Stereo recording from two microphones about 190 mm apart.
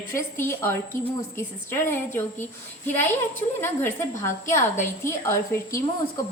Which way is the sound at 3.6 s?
15° left (ahead or behind).